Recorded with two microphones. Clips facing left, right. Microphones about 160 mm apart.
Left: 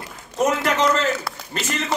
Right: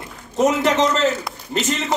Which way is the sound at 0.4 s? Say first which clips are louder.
Right 3 dB; 20° right (ahead or behind).